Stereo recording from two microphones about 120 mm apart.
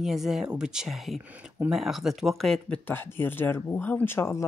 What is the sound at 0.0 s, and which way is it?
Speech, 5° right (ahead or behind).